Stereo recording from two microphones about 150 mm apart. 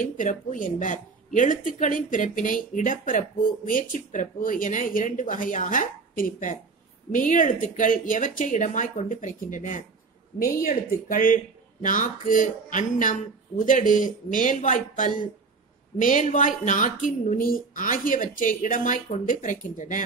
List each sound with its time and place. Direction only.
0.2 s a woman's voice: 60° left (ahead or behind)